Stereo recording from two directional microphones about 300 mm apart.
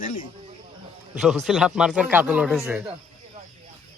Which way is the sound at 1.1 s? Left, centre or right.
Centre.